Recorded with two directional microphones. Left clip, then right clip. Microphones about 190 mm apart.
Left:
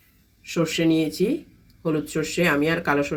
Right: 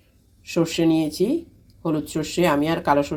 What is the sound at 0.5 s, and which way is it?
Speech, 30° right (ahead or behind).